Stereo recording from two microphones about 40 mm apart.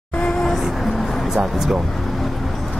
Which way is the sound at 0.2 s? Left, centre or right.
Centre.